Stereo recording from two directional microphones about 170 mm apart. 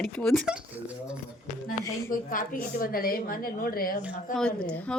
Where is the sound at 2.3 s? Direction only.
55° left (ahead or behind).